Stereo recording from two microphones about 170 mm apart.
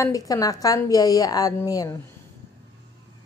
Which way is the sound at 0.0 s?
20° left (ahead or behind).